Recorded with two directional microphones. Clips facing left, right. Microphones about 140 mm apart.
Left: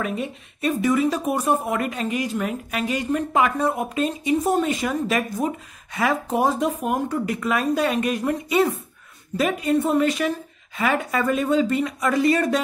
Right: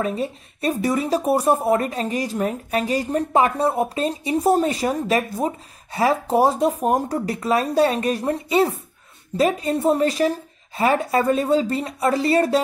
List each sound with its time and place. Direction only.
0.0 s speech: 35° right (ahead or behind)